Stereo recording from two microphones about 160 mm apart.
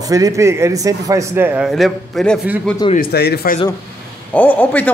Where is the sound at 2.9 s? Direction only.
80° left.